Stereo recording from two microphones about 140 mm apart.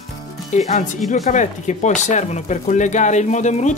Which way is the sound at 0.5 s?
60° left (ahead or behind).